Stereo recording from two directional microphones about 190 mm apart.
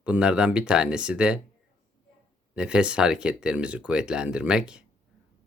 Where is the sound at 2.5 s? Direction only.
5° right (ahead or behind).